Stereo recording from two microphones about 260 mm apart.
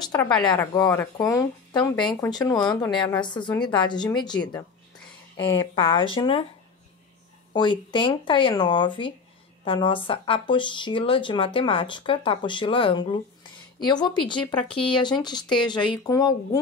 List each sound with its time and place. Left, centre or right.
0.0 s a sound: centre
0.5 s speech: centre
2.2 s a woman's voice: centre
7.5 s a woman's voice: centre